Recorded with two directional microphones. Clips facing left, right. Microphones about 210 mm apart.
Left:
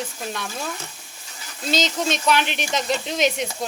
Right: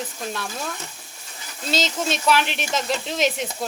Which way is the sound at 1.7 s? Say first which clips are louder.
Left 1 dB; centre (ahead or behind).